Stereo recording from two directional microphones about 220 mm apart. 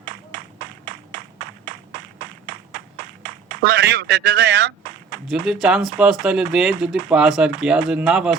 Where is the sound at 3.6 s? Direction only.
50° right (ahead or behind).